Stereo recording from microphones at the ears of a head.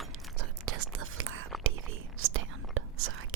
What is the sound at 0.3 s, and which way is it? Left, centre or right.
Whispering, right.